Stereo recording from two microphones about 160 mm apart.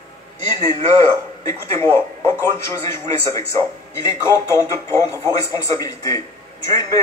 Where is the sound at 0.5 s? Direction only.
25° left (ahead or behind).